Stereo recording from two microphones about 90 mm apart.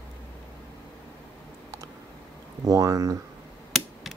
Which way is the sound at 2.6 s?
40° right (ahead or behind).